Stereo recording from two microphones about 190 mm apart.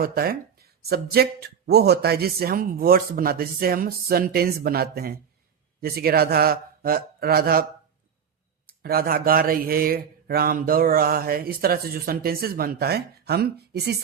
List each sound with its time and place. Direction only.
0.0 s speech: 50° right (ahead or behind)